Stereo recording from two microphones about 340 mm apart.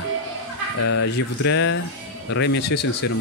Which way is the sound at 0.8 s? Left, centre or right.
Left.